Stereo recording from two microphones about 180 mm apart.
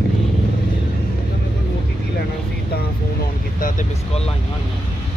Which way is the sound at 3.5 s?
50° left (ahead or behind).